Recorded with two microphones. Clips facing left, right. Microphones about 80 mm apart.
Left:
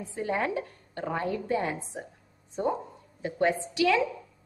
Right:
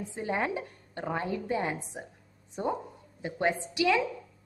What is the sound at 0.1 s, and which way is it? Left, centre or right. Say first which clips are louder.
A woman's voice: left 2 dB; right.